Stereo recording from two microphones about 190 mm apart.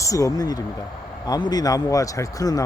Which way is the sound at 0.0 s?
15° left (ahead or behind).